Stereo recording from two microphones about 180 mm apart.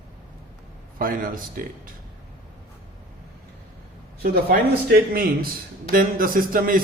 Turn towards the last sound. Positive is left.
turn(degrees=-50)  # may be behind; listen again after turning